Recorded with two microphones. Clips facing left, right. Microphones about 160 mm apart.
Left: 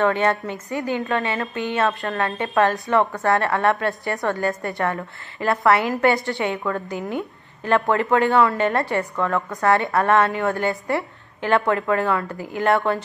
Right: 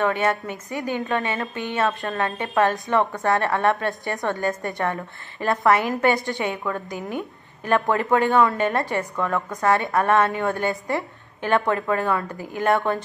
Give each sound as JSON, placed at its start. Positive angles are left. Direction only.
{"t": 0.0, "sound": "a woman's voice", "side_deg": -15}
{"t": 7.0, "sound": "speech", "side_deg": 20}
{"t": 7.9, "sound": "a woman's voice", "side_deg": -20}